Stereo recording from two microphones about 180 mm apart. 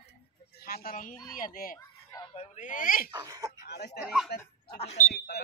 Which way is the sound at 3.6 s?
65° left (ahead or behind).